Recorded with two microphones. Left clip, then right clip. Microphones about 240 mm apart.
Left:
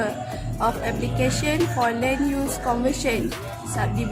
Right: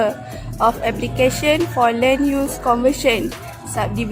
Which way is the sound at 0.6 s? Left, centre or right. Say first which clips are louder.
Right 7 dB; right.